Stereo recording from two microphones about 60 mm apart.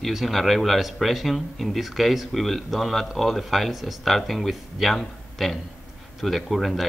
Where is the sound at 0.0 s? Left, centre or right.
Centre.